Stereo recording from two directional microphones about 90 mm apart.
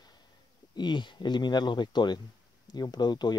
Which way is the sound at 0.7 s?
60° left (ahead or behind).